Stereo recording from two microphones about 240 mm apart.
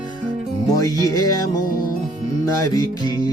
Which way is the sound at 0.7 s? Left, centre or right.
Centre.